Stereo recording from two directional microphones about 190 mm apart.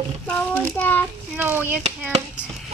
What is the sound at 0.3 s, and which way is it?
Speech, 10° left (ahead or behind).